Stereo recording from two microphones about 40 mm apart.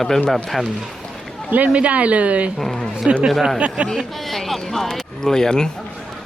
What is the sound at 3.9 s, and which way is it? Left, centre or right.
Speech, centre.